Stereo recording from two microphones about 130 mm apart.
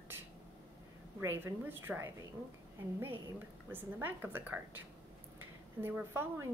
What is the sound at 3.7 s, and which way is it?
A woman's voice, 15° right (ahead or behind).